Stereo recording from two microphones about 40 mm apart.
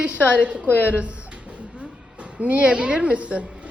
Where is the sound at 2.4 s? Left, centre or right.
Right.